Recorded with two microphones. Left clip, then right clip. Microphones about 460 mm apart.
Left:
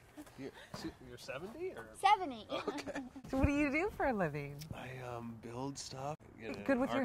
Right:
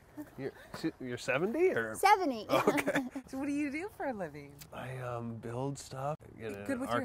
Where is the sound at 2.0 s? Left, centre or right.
Right.